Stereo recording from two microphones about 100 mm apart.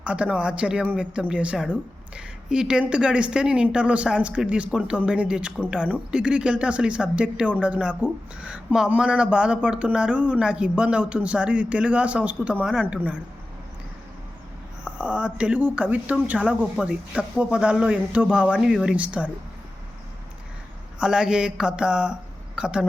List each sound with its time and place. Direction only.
0.0 s speech: 10° right (ahead or behind)
14.8 s speech: 10° right (ahead or behind)
21.0 s speech: 5° right (ahead or behind)